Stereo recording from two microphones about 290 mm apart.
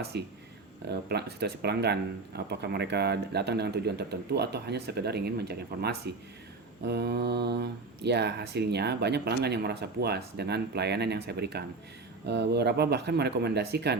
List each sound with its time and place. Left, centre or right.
0.0 s speech: right